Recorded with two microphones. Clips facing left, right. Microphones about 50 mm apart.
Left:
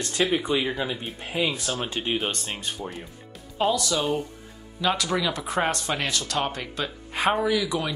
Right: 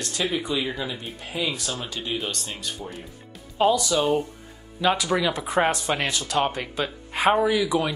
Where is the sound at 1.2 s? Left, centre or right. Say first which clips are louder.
Left 2 dB; left.